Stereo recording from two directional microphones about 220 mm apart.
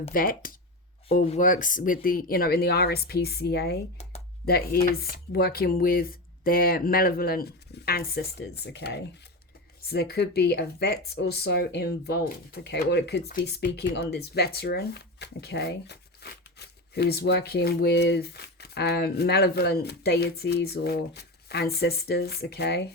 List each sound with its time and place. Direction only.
0.1 s speech: 40° left (ahead or behind)